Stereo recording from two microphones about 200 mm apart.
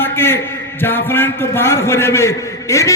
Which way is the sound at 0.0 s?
10° left (ahead or behind).